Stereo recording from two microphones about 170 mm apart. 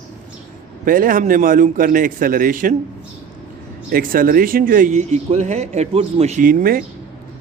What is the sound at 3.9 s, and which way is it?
Speech, 55° right (ahead or behind).